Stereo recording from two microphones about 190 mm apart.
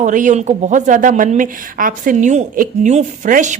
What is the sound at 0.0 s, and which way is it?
Speech, 40° right (ahead or behind).